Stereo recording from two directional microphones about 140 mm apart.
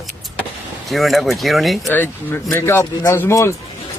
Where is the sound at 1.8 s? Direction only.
15° left (ahead or behind).